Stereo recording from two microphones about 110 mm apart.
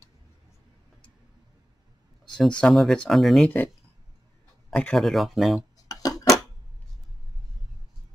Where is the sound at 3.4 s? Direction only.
15° left (ahead or behind).